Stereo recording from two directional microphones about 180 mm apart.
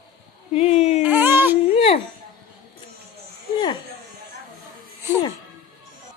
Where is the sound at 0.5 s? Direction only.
35° left (ahead or behind).